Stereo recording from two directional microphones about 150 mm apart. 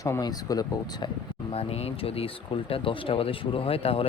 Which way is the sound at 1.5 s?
40° left (ahead or behind).